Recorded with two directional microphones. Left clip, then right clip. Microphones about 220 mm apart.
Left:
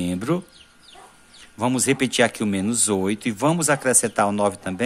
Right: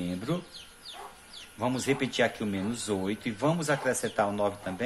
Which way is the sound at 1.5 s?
45° left (ahead or behind).